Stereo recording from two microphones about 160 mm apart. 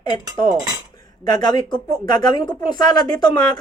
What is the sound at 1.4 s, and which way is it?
Speech, 25° left (ahead or behind).